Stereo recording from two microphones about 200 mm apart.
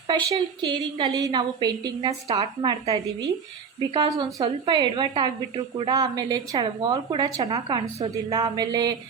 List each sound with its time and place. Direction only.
0.3 s a woman's voice: 25° right (ahead or behind)